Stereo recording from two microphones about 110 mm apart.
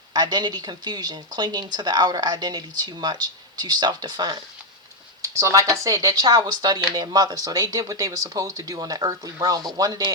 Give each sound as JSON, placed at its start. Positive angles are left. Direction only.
{"t": 0.1, "sound": "speech", "side_deg": -40}
{"t": 5.2, "sound": "speech", "side_deg": -25}